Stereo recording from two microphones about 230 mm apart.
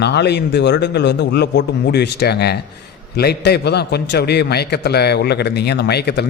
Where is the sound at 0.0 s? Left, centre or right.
Left.